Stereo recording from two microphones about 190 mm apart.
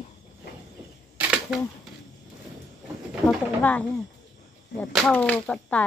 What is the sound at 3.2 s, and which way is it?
Speech, 10° left (ahead or behind).